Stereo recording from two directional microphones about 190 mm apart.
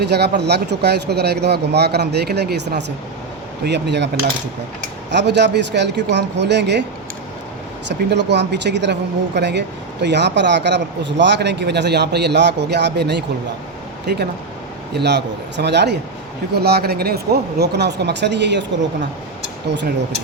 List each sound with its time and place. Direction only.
0.0 s speech: 60° right (ahead or behind)
5.1 s speech: 65° right (ahead or behind)
7.9 s speech: 65° right (ahead or behind)